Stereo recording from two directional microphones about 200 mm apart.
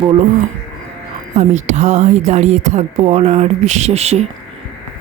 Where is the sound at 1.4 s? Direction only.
35° right (ahead or behind).